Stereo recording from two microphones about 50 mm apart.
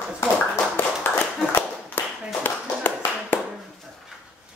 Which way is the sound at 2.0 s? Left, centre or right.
Left.